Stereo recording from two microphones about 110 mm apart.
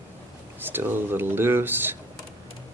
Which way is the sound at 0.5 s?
20° right (ahead or behind).